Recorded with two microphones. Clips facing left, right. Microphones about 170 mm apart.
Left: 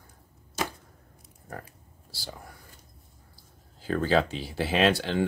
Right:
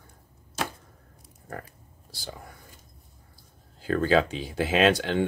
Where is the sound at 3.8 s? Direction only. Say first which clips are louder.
Right 2 dB; 15° right (ahead or behind).